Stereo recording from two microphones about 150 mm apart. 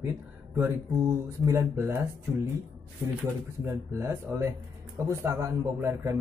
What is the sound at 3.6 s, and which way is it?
Speech, 20° right (ahead or behind).